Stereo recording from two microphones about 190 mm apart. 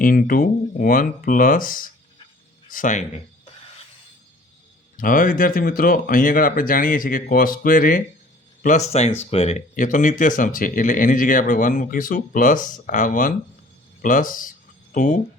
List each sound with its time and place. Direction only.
0.0 s speech: 50° left (ahead or behind)
4.9 s speech: 45° left (ahead or behind)